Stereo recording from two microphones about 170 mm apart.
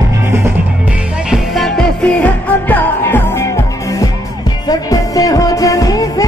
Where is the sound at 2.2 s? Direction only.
10° left (ahead or behind).